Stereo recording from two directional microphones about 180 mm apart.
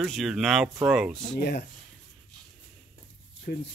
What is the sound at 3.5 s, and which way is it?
Speech, 55° left (ahead or behind).